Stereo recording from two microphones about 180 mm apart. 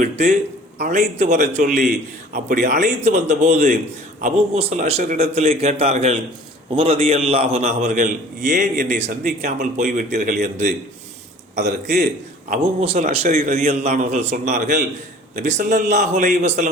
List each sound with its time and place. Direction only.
0.0 s a sound: 45° right (ahead or behind)
0.8 s a man's voice: 40° right (ahead or behind)
12.5 s a man's voice: 35° right (ahead or behind)